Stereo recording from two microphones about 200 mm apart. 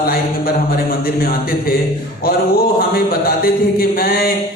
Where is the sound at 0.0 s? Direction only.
50° left (ahead or behind).